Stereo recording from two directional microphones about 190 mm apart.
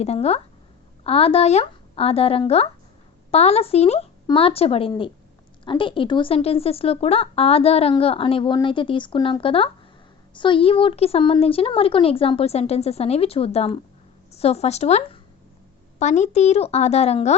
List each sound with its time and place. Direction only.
0.0 s speech: 35° left (ahead or behind)